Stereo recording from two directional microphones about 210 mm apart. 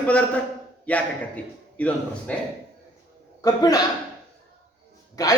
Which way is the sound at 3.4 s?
20° left (ahead or behind).